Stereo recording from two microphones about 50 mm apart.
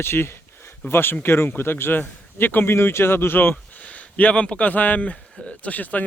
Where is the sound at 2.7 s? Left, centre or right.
Left.